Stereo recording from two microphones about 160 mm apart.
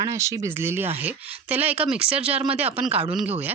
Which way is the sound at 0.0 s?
20° right (ahead or behind).